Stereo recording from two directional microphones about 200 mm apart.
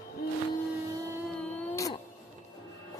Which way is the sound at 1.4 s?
5° left (ahead or behind).